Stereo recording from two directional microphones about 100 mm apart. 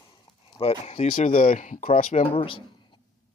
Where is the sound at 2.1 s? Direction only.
75° left (ahead or behind).